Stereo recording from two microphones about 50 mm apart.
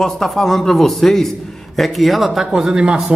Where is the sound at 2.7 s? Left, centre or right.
Centre.